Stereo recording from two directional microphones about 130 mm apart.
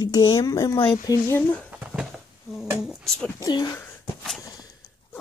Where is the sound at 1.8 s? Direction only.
5° right (ahead or behind).